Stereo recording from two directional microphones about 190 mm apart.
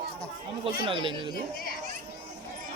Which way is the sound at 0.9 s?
25° right (ahead or behind).